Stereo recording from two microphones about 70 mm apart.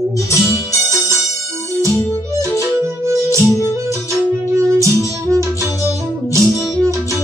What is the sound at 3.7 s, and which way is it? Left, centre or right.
Music, right.